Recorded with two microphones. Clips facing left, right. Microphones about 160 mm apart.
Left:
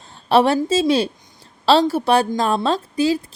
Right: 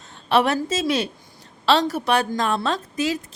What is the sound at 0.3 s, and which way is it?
A woman's voice, 30° left (ahead or behind).